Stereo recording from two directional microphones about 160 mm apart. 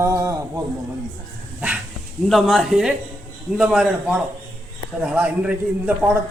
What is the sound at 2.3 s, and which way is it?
A man's voice, centre (ahead or behind).